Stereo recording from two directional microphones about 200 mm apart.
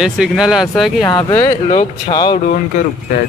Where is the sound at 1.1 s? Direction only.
20° left (ahead or behind).